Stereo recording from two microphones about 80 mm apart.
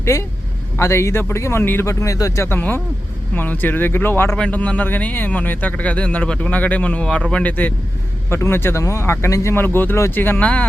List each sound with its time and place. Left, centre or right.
0.0 s speech: left
1.9 s speech: left
2.6 s speech: centre
4.4 s speech: centre
8.3 s speech: left